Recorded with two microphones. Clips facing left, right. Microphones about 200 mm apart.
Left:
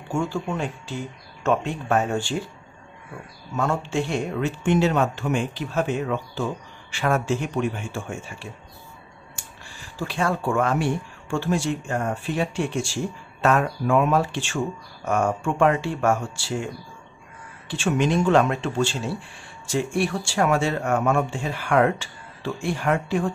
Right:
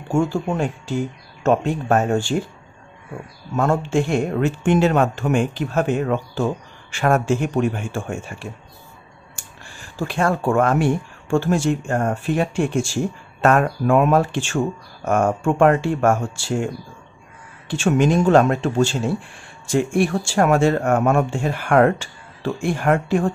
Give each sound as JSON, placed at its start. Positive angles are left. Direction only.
{"t": 0.1, "sound": "speech", "side_deg": -45}
{"t": 3.5, "sound": "speech", "side_deg": -50}